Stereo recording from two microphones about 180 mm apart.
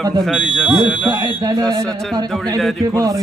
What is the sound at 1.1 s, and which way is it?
Speech, 25° right (ahead or behind).